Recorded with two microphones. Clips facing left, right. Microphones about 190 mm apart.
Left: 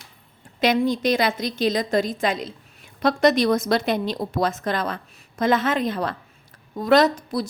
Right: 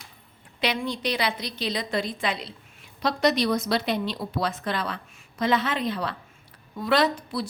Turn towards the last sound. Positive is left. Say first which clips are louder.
# left 4 dB
turn(degrees=45)  # may be behind; listen again after turning